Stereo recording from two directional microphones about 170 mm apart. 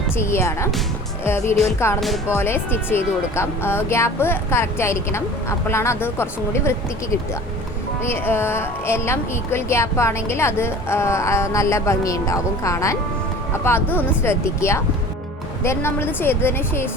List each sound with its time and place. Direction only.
0.2 s a woman's voice: 15° left (ahead or behind)
1.8 s a woman's voice: 15° left (ahead or behind)